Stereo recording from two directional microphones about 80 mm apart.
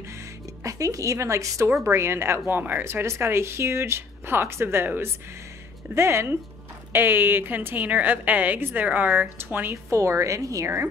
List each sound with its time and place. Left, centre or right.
0.7 s a woman's voice: right
9.8 s speech: right